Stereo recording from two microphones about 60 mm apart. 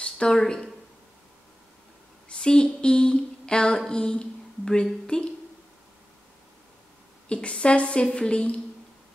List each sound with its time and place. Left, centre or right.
0.0 s speech: centre
2.2 s a woman's voice: centre
7.2 s a woman's voice: centre